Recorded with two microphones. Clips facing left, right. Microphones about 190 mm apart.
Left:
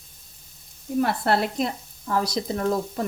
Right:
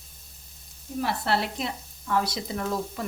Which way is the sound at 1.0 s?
50° left (ahead or behind).